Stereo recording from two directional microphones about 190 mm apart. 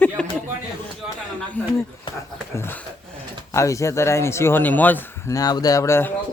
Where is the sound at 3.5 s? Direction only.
15° left (ahead or behind).